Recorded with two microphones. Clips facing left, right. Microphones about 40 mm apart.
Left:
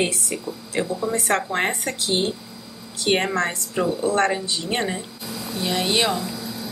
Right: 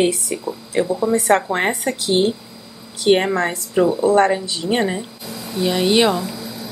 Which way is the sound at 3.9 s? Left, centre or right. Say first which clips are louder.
Right 5 dB; right.